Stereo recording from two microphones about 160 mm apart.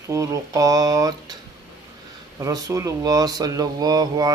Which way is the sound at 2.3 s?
20° right (ahead or behind).